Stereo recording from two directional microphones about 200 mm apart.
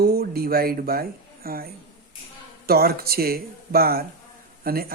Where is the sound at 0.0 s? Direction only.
50° right (ahead or behind).